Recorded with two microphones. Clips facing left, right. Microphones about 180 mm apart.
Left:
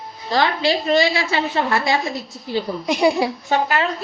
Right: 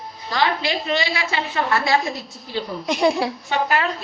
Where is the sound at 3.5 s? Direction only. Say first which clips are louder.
Left 3 dB; 40° left (ahead or behind).